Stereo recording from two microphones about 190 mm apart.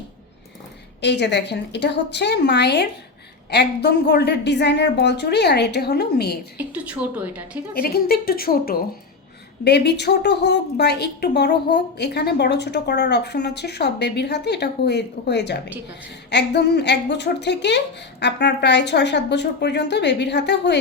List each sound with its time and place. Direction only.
1.0 s a woman's voice: 65° left (ahead or behind)
6.6 s a woman's voice: 5° right (ahead or behind)
7.7 s a woman's voice: 55° left (ahead or behind)